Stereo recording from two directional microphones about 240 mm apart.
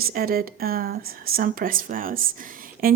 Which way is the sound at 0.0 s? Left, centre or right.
Right.